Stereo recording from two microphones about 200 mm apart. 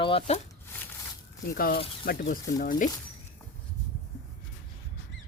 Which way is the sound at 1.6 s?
50° left (ahead or behind).